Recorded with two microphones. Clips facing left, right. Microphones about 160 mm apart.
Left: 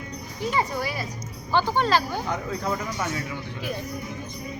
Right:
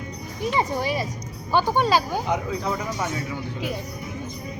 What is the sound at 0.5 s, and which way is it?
Speech, 20° right (ahead or behind).